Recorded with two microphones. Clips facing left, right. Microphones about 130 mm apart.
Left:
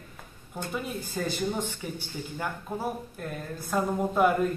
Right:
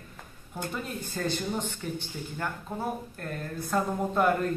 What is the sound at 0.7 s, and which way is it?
A man's voice, 5° left (ahead or behind).